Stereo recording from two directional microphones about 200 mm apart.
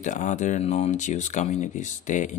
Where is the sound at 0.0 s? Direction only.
40° left (ahead or behind).